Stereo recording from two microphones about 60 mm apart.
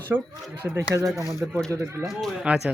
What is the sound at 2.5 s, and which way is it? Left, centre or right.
Speech, right.